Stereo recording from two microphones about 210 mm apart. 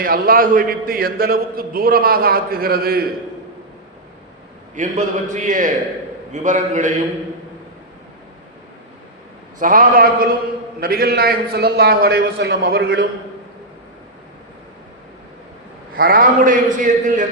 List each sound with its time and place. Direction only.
0.0 s a man's voice: 45° right (ahead or behind)
4.7 s a man's voice: 35° right (ahead or behind)
9.6 s a man's voice: 40° right (ahead or behind)
16.0 s a man's voice: 45° right (ahead or behind)